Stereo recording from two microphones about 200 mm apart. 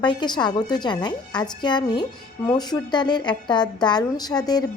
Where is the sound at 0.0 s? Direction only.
20° left (ahead or behind).